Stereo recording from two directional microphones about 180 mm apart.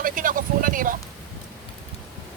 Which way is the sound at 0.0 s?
50° right (ahead or behind).